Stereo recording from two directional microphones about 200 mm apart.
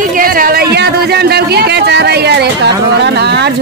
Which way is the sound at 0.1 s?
45° right (ahead or behind).